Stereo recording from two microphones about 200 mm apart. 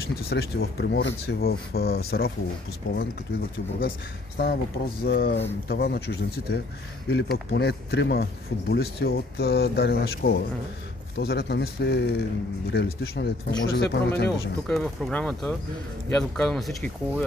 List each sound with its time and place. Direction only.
0.1 s speech: 50° left (ahead or behind)
4.4 s speech: 50° left (ahead or behind)
14.7 s speech: 5° left (ahead or behind)